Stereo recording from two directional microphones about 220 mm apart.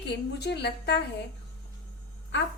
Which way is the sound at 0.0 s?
50° left (ahead or behind).